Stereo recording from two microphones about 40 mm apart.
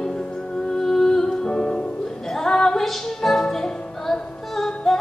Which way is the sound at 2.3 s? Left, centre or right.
Centre.